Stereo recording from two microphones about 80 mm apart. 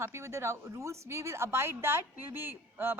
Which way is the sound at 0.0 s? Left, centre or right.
Right.